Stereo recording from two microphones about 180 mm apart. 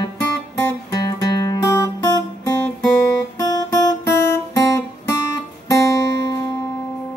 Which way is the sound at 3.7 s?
20° left (ahead or behind).